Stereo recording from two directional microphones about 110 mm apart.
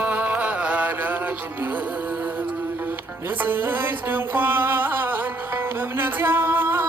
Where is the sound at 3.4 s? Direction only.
15° right (ahead or behind).